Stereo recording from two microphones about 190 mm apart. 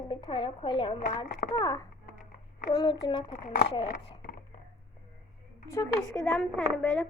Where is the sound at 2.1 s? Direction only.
45° left (ahead or behind).